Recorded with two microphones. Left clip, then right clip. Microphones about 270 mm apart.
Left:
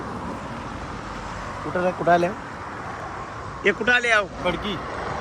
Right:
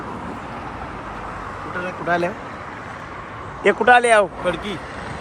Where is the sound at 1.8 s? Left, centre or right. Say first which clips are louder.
Left 2 dB; centre.